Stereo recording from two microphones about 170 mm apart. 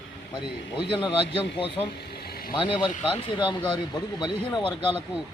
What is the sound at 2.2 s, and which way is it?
Vehicle, 65° left (ahead or behind).